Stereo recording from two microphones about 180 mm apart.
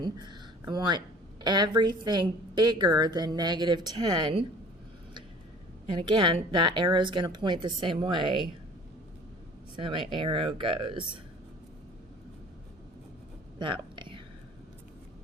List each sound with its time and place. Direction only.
0.0 s speech: 25° right (ahead or behind)
5.9 s speech: 25° right (ahead or behind)
9.7 s speech: 25° right (ahead or behind)
13.9 s a sound: 25° right (ahead or behind)